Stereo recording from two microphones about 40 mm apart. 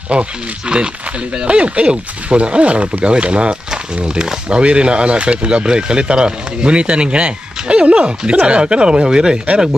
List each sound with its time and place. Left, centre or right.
0.1 s speech: right